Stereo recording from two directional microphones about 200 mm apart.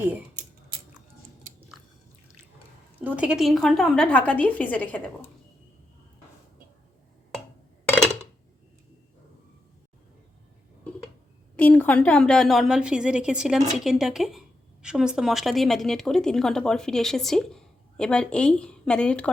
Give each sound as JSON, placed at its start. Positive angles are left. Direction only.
{"t": 3.0, "sound": "a woman's voice", "side_deg": -5}
{"t": 7.9, "sound": "a sound", "side_deg": 5}
{"t": 11.5, "sound": "a woman's voice", "side_deg": 10}